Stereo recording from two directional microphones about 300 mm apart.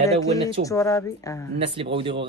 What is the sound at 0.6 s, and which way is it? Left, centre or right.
Speech, centre.